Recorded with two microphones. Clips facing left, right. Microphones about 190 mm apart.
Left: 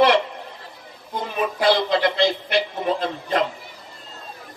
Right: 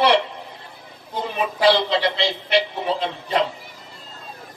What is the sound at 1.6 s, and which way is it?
A man's voice, 50° left (ahead or behind).